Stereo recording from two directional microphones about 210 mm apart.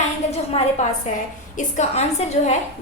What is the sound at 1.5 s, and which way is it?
A woman's voice, 35° left (ahead or behind).